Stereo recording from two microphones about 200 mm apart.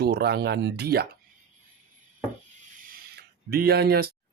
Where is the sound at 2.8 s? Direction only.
45° right (ahead or behind).